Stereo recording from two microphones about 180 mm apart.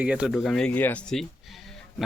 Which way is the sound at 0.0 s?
5° right (ahead or behind).